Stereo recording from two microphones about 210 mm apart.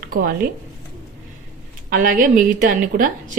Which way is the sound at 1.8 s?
40° right (ahead or behind).